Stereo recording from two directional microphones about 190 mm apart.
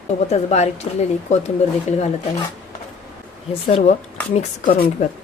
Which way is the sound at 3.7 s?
35° left (ahead or behind).